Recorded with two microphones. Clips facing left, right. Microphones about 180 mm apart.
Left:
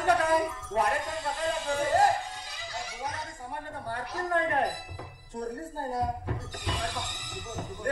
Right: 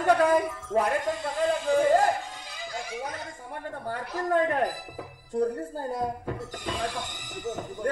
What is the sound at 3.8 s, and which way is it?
Speech, 45° right (ahead or behind).